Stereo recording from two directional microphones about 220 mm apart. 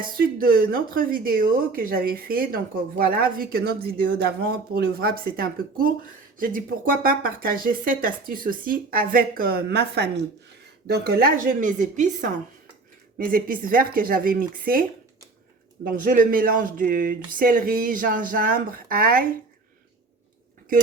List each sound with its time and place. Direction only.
0.2 s speech: 40° right (ahead or behind)